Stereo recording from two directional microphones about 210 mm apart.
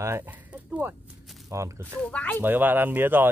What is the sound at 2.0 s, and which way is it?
Speech, 5° left (ahead or behind).